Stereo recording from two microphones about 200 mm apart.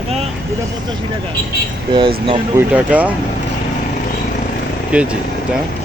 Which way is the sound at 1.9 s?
25° right (ahead or behind).